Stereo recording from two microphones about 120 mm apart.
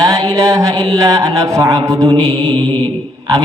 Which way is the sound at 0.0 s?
30° right (ahead or behind).